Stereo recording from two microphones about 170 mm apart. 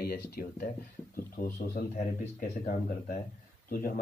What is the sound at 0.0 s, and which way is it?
Speech, 65° left (ahead or behind).